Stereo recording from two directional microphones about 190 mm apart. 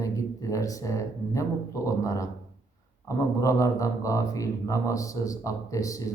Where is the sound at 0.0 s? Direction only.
15° left (ahead or behind).